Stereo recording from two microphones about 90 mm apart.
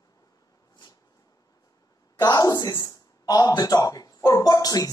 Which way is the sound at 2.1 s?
50° left (ahead or behind).